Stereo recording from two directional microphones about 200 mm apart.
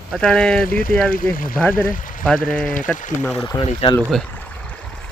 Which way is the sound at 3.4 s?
25° left (ahead or behind).